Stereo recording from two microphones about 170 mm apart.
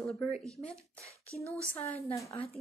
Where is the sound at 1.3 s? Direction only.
15° right (ahead or behind).